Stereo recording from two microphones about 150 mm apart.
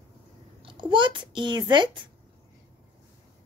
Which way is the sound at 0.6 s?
35° right (ahead or behind).